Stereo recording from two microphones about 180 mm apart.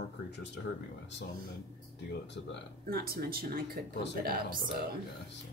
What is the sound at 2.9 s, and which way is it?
Speech, 55° right (ahead or behind).